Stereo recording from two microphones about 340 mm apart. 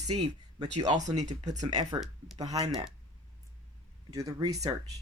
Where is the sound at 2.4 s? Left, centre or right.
Centre.